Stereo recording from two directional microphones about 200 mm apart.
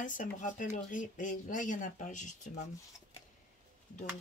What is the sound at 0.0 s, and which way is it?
Speech, 40° left (ahead or behind).